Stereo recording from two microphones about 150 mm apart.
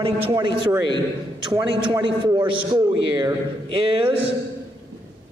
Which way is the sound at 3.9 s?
35° right (ahead or behind).